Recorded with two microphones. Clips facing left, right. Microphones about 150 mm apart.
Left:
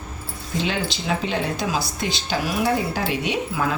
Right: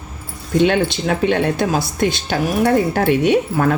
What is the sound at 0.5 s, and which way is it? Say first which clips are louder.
Speech: right 10 dB; 60° right (ahead or behind).